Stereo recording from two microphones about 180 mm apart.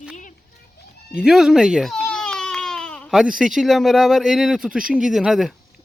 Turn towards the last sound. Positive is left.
turn(degrees=-5)  # may be behind; listen again after turning